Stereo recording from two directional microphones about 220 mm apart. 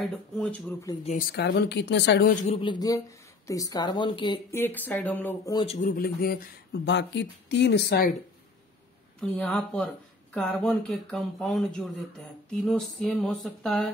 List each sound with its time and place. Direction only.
0.0 s speech: centre (ahead or behind)
1.3 s speech: 50° left (ahead or behind)
2.4 s speech: 25° left (ahead or behind)
5.8 s speech: 40° left (ahead or behind)
9.2 s speech: 5° left (ahead or behind)